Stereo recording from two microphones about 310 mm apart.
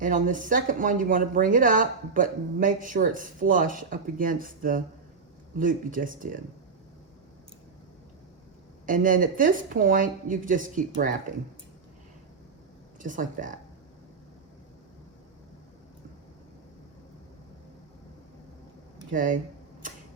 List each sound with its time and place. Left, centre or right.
0.0 s a woman's voice: right
8.9 s a woman's voice: right
13.0 s a woman's voice: right
19.1 s a woman's voice: right